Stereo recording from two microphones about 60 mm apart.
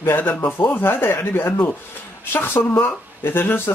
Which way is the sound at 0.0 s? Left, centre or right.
Left.